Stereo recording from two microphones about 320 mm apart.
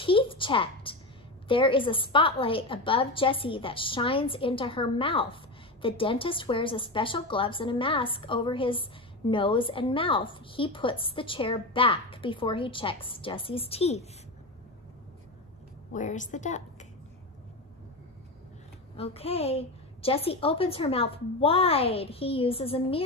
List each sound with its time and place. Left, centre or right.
0.0 s a sound: centre
1.5 s a woman's voice: centre
15.9 s a woman's voice: left
18.9 s a woman's voice: centre